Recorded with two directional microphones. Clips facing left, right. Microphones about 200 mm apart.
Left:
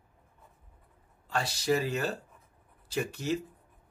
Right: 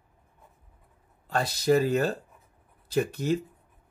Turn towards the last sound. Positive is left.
turn(degrees=-55)  # may be behind; listen again after turning